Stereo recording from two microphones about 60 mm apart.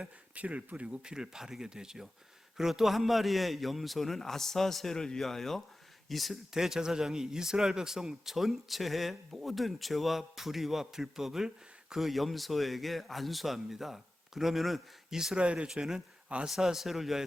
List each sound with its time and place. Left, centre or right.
0.0 s speech: right
1.1 s speech: centre